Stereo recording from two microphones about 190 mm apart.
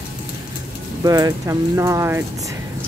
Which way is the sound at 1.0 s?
20° right (ahead or behind).